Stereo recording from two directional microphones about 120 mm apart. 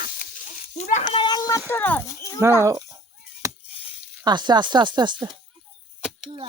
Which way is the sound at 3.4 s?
25° right (ahead or behind).